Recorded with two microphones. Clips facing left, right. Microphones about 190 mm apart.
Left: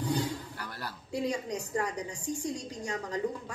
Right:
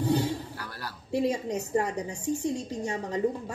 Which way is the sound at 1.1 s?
25° right (ahead or behind).